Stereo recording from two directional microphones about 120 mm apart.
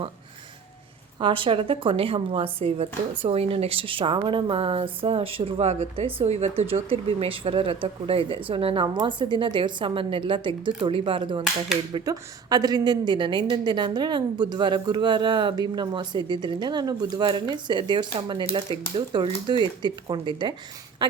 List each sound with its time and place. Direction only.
1.2 s speech: 45° right (ahead or behind)
12.0 s a woman's voice: 35° right (ahead or behind)